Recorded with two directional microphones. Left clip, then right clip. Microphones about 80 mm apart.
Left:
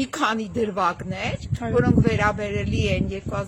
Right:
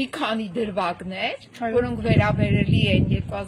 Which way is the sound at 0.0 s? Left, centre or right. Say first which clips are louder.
Left 2 dB; left.